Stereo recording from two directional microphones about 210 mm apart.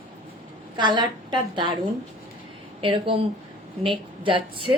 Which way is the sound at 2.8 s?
25° right (ahead or behind).